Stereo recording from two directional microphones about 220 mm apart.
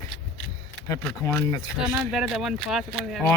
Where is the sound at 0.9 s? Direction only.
10° left (ahead or behind).